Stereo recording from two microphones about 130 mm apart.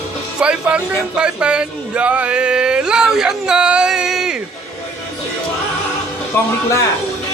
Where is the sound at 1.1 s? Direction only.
10° right (ahead or behind).